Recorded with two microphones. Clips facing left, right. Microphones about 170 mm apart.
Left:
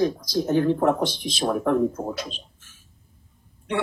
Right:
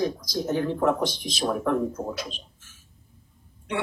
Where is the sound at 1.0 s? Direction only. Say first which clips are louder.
Left 2 dB; 30° left (ahead or behind).